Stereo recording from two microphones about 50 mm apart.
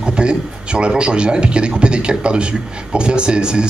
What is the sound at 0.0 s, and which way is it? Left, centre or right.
A man's voice, centre.